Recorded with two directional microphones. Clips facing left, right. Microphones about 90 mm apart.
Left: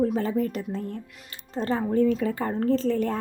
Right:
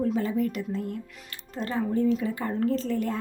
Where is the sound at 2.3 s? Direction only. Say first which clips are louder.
Left 2 dB; 40° left (ahead or behind).